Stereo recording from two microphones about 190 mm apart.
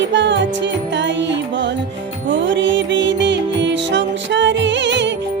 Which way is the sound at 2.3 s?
75° right (ahead or behind).